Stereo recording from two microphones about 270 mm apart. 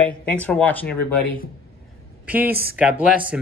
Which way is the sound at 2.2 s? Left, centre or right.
Centre.